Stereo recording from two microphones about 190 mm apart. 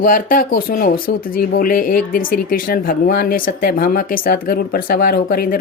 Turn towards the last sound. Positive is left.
turn(degrees=50)  # may be behind; listen again after turning